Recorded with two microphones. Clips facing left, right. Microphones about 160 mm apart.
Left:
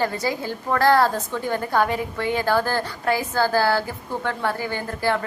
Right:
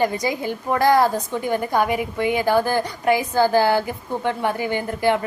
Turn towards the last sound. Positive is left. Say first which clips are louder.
# right 4 dB
turn(degrees=-15)  # may be behind; listen again after turning